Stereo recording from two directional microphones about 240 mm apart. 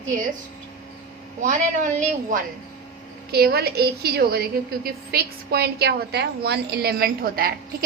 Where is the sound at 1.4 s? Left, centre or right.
Right.